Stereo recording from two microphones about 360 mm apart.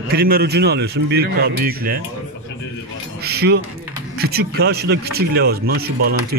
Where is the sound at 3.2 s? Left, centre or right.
Right.